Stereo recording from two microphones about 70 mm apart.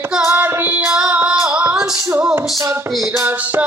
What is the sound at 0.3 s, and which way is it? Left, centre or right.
Child singing, right.